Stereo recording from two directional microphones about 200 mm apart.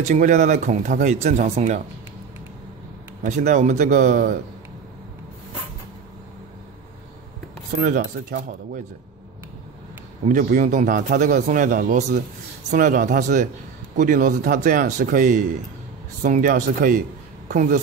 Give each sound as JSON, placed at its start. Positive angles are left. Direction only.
{"t": 0.0, "sound": "a man's voice", "side_deg": -40}
{"t": 3.3, "sound": "a man's voice", "side_deg": -35}
{"t": 7.7, "sound": "speech", "side_deg": -45}
{"t": 10.2, "sound": "a man's voice", "side_deg": -40}